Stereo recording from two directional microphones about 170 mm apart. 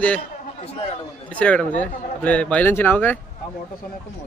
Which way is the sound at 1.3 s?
5° left (ahead or behind).